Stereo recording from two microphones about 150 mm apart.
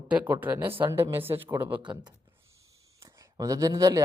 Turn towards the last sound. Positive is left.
turn(degrees=-20)  # may be behind; listen again after turning